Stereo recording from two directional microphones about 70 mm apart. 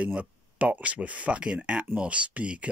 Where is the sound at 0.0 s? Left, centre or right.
Right.